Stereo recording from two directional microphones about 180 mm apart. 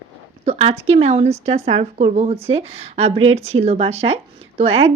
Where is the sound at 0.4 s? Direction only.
35° right (ahead or behind).